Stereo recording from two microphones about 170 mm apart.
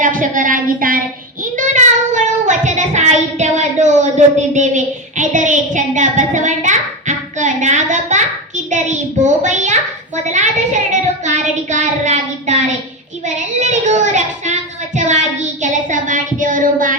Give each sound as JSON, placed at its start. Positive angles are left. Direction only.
{"t": 0.0, "sound": "child singing", "side_deg": -50}
{"t": 9.2, "sound": "a sound", "side_deg": -45}
{"t": 10.2, "sound": "a child's voice", "side_deg": -45}
{"t": 11.2, "sound": "child singing", "side_deg": -45}